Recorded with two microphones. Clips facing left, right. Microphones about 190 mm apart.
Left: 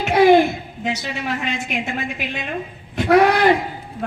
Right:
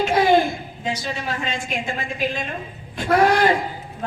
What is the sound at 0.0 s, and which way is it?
A woman's voice, 65° left (ahead or behind).